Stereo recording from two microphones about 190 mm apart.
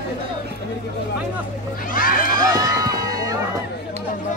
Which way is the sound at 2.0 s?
50° left (ahead or behind).